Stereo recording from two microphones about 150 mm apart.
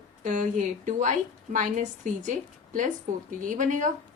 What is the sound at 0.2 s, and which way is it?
A woman's voice, 60° right (ahead or behind).